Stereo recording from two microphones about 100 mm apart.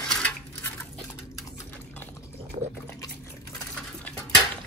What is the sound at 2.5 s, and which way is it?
Liquid, 90° right.